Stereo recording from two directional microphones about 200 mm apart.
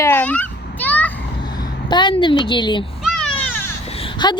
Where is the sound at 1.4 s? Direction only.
20° left (ahead or behind).